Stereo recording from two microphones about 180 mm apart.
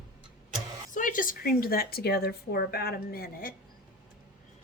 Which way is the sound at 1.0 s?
50° left (ahead or behind).